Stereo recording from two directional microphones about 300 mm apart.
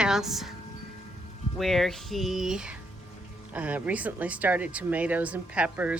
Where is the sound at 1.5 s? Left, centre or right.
Centre.